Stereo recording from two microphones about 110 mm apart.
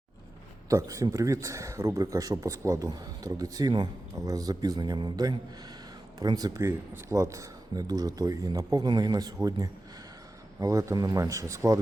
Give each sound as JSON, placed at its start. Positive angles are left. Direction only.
{"t": 0.7, "sound": "speech", "side_deg": -30}